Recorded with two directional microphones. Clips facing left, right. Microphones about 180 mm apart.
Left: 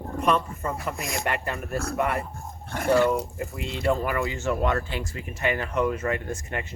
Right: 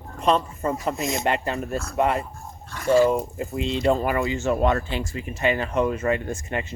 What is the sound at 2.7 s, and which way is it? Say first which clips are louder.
Speech: right 3 dB; 60° left (ahead or behind).